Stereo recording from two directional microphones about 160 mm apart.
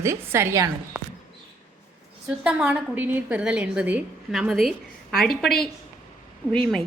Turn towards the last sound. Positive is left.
turn(degrees=5)  # may be behind; listen again after turning